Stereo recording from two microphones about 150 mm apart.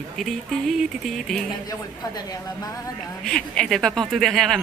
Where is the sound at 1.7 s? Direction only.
25° left (ahead or behind).